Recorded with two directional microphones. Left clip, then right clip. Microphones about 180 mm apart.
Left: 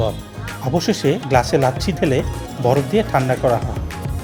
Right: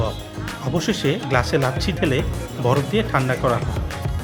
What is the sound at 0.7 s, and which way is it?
Speech, 5° left (ahead or behind).